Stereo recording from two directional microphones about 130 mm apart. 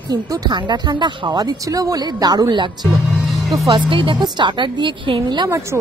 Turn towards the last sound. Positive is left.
turn(degrees=-25)  # may be behind; listen again after turning